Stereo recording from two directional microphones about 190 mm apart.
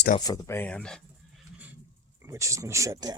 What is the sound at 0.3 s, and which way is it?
Speech, 15° left (ahead or behind).